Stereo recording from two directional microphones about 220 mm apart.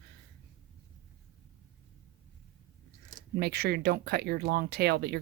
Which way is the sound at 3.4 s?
45° right (ahead or behind).